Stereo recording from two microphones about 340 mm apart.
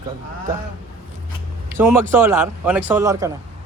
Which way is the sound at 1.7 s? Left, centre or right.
Centre.